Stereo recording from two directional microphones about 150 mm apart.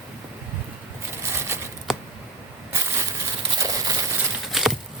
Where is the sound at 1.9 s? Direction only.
Centre (ahead or behind).